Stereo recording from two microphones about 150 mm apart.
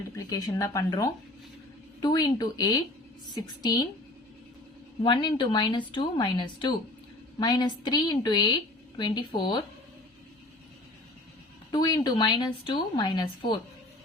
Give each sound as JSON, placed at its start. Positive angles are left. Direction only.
{"t": 0.2, "sound": "a woman's voice", "side_deg": 25}
{"t": 5.0, "sound": "a woman's voice", "side_deg": 30}
{"t": 11.7, "sound": "a woman's voice", "side_deg": 25}